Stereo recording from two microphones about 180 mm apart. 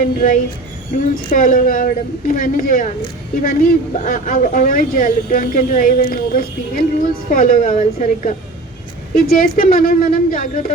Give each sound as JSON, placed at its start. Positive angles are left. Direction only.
{"t": 0.0, "sound": "speech", "side_deg": 50}